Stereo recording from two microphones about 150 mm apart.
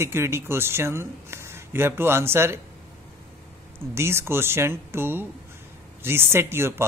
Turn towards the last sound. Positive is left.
turn(degrees=-15)  # may be behind; listen again after turning